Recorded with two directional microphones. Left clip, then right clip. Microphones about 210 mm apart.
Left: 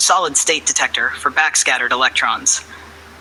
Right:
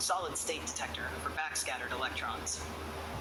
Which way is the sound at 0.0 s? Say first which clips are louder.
Left 19 dB; 40° left (ahead or behind).